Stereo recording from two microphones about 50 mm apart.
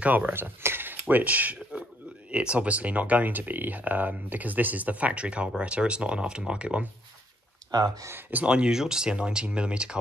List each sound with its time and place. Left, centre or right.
0.0 s speech: right
0.3 s mechanisms: right
1.0 s speech: right
8.5 s speech: centre